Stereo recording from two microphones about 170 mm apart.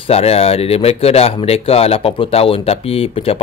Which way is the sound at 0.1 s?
35° left (ahead or behind).